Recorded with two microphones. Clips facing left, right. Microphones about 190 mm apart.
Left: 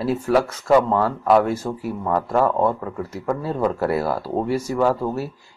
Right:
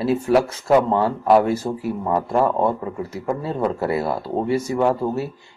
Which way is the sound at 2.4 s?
25° right (ahead or behind).